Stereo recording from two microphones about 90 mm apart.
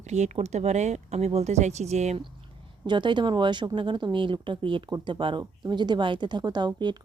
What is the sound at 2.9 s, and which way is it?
Speech, 60° right (ahead or behind).